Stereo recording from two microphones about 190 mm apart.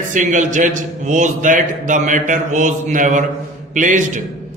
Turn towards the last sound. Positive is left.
turn(degrees=-40)  # may be behind; listen again after turning